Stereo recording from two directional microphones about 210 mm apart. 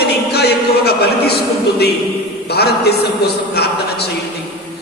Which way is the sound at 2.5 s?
50° left (ahead or behind).